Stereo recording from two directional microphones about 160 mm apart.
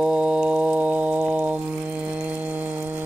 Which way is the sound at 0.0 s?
5° right (ahead or behind).